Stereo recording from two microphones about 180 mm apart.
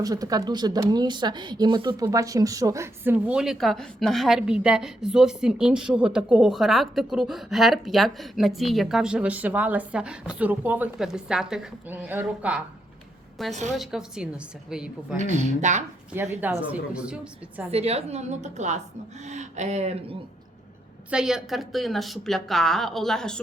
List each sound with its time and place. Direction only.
0.0 s speech: 20° right (ahead or behind)
15.2 s a woman's voice: 40° right (ahead or behind)
16.1 s speech: 15° right (ahead or behind)
17.7 s a woman's voice: 35° right (ahead or behind)
21.1 s speech: 5° right (ahead or behind)